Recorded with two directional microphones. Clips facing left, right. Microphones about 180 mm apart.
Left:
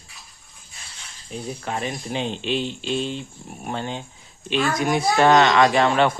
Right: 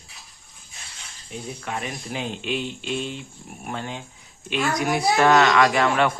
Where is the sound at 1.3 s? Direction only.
30° left (ahead or behind).